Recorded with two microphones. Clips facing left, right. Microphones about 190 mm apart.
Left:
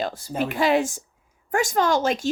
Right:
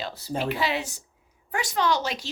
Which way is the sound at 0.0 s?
50° left (ahead or behind).